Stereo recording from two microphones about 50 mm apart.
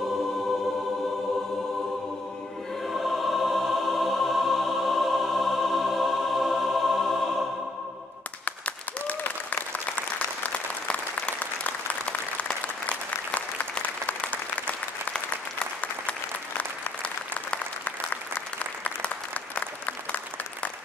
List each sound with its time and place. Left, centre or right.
2.9 s music: centre
8.5 s applause: left
18.9 s applause: left